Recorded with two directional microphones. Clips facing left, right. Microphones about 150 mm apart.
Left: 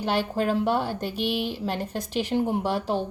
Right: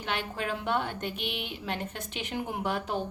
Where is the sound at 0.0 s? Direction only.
35° left (ahead or behind).